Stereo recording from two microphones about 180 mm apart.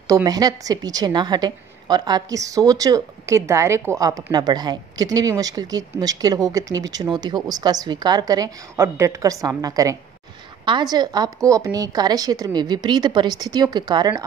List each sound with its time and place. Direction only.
0.1 s a woman's voice: 20° right (ahead or behind)